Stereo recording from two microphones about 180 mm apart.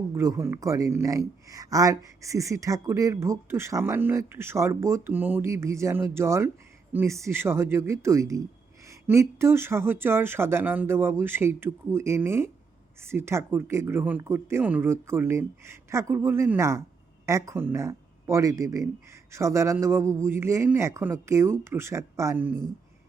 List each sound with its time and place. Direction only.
0.1 s speech: 15° right (ahead or behind)